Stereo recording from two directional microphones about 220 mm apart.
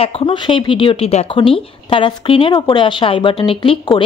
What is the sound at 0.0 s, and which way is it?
A woman's voice, 25° left (ahead or behind).